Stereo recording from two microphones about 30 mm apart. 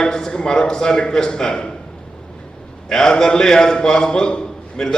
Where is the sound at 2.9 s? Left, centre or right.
Centre.